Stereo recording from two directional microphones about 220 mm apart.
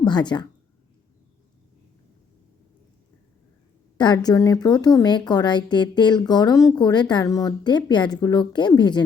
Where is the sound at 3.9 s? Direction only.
20° left (ahead or behind).